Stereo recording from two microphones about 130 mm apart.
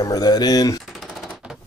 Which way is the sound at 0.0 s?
30° left (ahead or behind).